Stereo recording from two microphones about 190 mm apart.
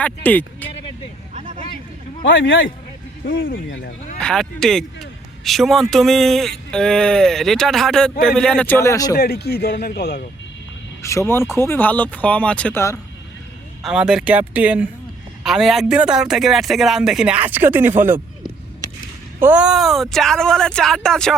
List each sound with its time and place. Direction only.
0.0 s speech: 10° left (ahead or behind)
2.2 s speech: 75° left (ahead or behind)
3.5 s speech: 70° left (ahead or behind)
4.2 s a sound: 5° left (ahead or behind)
5.9 s speech: centre (ahead or behind); by 9.1 s 15° left (ahead or behind)
9.1 s speech: 55° left (ahead or behind)
11.0 s speech: 15° left (ahead or behind)
13.8 s speech: 5° right (ahead or behind)
19.4 s speech: 10° right (ahead or behind)